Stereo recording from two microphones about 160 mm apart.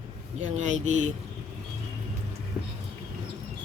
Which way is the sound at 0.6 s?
45° right (ahead or behind).